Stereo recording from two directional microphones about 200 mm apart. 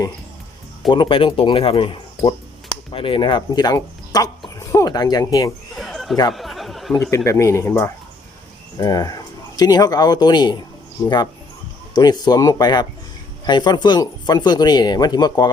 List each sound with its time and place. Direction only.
0.9 s speech: 25° left (ahead or behind)
5.7 s a sound: centre (ahead or behind)
7.3 s speech: 15° left (ahead or behind)
11.9 s speech: 20° left (ahead or behind)